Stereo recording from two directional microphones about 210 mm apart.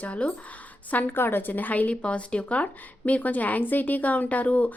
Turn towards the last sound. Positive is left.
turn(degrees=5)  # may be behind; listen again after turning